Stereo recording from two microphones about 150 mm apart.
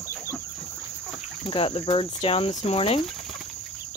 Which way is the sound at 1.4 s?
35° left (ahead or behind).